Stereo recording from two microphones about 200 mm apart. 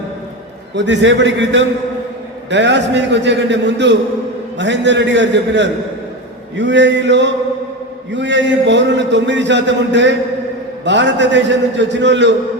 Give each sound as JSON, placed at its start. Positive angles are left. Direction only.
{"t": 0.8, "sound": "a man's voice", "side_deg": -65}